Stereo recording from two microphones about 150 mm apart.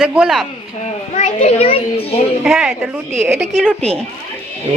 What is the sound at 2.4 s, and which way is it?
Speech, 5° right (ahead or behind).